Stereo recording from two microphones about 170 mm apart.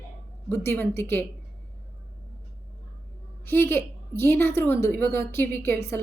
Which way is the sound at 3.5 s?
15° left (ahead or behind).